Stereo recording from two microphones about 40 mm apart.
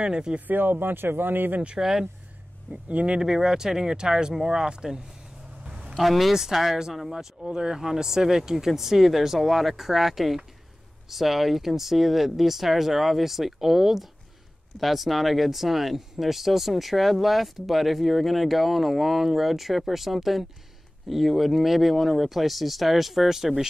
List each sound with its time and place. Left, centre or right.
0.0 s speech: centre
0.5 s speech: right
1.8 s speech: centre
2.7 s speech: right
3.2 s speech: centre
5.9 s speech: centre
6.3 s speech: centre
7.4 s speech: centre